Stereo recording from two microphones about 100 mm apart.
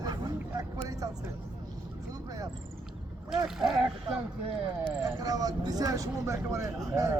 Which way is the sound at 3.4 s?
5° right (ahead or behind).